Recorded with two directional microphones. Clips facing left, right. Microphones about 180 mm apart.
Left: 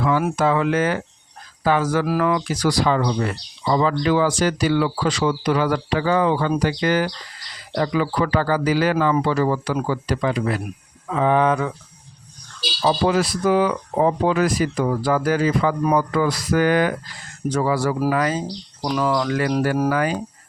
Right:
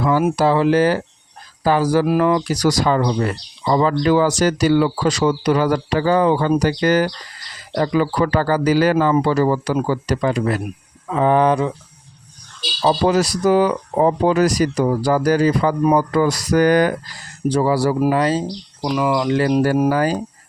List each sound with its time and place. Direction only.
0.0 s speech: 40° right (ahead or behind)
12.8 s speech: 40° right (ahead or behind)
18.8 s speech: 10° right (ahead or behind)
19.3 s speech: 25° right (ahead or behind)
19.9 s speech: 35° right (ahead or behind)